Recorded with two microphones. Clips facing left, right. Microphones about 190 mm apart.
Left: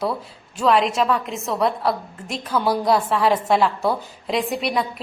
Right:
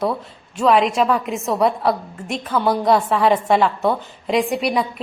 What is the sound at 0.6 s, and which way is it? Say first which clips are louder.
A woman's voice: right 2 dB; 5° right (ahead or behind).